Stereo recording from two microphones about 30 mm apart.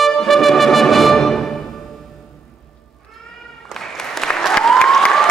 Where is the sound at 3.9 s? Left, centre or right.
Centre.